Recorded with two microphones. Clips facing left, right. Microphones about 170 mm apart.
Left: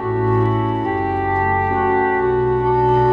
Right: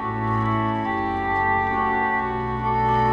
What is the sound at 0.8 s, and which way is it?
Music, 55° left (ahead or behind).